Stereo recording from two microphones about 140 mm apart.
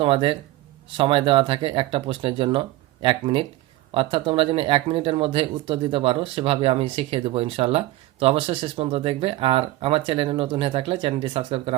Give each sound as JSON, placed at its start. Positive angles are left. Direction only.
{"t": 0.0, "sound": "speech", "side_deg": -40}